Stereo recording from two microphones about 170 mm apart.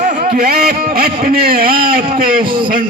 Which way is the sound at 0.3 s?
60° right (ahead or behind).